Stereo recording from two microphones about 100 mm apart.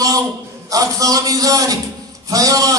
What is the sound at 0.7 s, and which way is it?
A man's voice, 35° right (ahead or behind).